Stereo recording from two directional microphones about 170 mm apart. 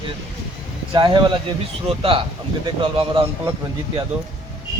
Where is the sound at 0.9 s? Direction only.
25° right (ahead or behind).